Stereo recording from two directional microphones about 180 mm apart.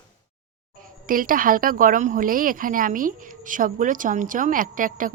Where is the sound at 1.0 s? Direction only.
50° right (ahead or behind).